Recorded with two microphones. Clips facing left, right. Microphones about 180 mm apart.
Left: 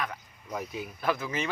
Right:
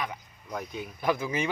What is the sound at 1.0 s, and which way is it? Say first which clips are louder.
Speech: right 3 dB; 15° right (ahead or behind).